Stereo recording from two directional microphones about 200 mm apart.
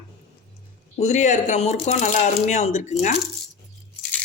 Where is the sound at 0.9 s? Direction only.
35° left (ahead or behind).